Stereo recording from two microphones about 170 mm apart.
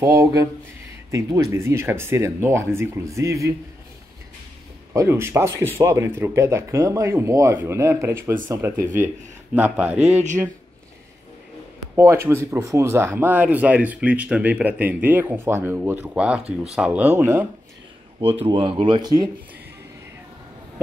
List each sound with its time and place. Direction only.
0.0 s speech: 15° right (ahead or behind)
4.9 s speech: 15° right (ahead or behind)
11.9 s speech: 15° right (ahead or behind)
18.2 s speech: 35° right (ahead or behind)